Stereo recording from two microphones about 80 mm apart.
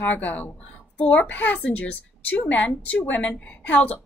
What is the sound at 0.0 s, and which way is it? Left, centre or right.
A woman's voice, centre.